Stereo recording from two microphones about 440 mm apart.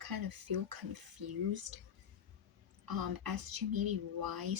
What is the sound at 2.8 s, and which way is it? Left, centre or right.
Speech, right.